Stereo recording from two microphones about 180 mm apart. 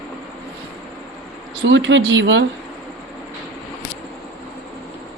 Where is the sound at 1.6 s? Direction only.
90° right.